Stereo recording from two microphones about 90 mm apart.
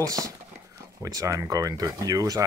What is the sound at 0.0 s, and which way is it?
Speech, 40° right (ahead or behind).